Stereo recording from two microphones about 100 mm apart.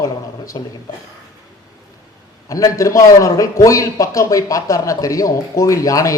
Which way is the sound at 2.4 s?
35° left (ahead or behind).